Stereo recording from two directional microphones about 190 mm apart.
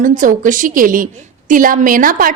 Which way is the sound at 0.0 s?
45° right (ahead or behind).